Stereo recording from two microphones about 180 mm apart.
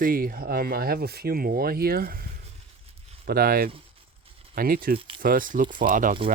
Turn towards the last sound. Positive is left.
turn(degrees=-50)  # may be behind; listen again after turning